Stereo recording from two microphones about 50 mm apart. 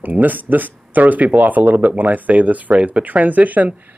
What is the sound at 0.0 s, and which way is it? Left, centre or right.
Speech, right.